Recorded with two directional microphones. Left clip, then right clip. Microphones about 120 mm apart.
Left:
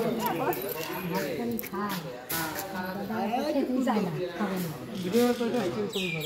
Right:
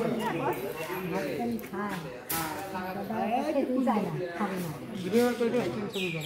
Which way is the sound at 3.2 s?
25° left (ahead or behind).